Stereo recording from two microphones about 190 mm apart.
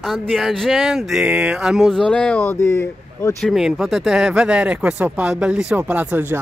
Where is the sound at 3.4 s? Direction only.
Centre (ahead or behind).